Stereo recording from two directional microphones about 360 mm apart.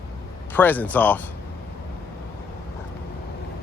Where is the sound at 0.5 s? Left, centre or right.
Centre.